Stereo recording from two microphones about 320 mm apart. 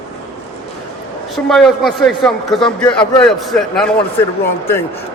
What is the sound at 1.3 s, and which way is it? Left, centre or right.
A man's voice, centre.